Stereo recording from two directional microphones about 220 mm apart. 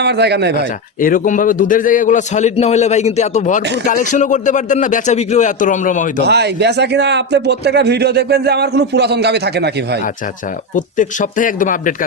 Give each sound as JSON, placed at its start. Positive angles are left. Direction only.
{"t": 0.0, "sound": "a man's voice", "side_deg": -50}
{"t": 1.0, "sound": "a man's voice", "side_deg": 35}
{"t": 6.2, "sound": "a man's voice", "side_deg": -50}
{"t": 10.8, "sound": "a man's voice", "side_deg": 35}